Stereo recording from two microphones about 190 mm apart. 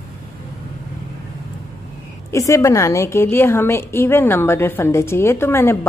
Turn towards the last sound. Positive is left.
turn(degrees=15)  # may be behind; listen again after turning